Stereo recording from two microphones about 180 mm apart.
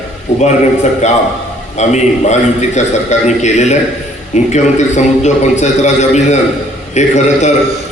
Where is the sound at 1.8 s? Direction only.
40° left (ahead or behind).